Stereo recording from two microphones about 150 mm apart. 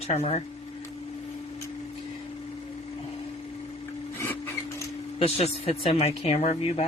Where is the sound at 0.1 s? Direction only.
45° left (ahead or behind).